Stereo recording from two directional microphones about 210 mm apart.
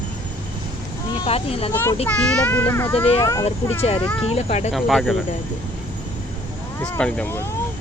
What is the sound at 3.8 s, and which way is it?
Speech, 30° left (ahead or behind).